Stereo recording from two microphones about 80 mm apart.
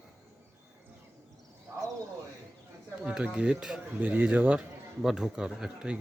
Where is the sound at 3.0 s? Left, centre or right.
Centre.